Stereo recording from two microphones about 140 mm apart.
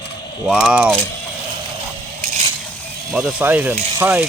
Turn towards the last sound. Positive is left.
turn(degrees=-15)  # may be behind; listen again after turning